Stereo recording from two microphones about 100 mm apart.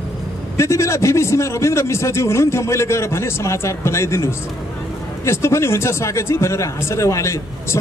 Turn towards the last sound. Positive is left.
turn(degrees=30)  # may be behind; listen again after turning